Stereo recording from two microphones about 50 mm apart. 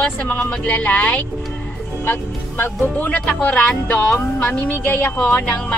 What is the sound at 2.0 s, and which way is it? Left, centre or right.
Speech, left.